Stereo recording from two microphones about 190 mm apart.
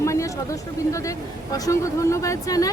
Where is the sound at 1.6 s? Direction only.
15° left (ahead or behind).